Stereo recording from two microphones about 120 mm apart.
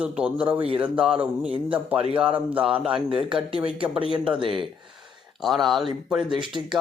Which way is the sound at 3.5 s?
50° right (ahead or behind).